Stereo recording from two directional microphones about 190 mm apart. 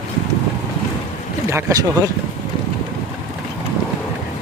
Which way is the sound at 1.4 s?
15° right (ahead or behind).